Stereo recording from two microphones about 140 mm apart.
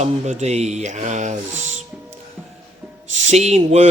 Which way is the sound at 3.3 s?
50° right (ahead or behind).